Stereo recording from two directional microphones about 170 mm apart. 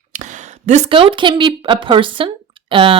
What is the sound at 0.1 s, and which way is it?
Speech, 45° right (ahead or behind).